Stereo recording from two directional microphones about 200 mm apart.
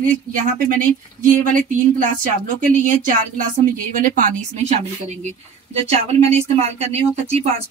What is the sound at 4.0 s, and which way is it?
A woman's voice, 40° right (ahead or behind).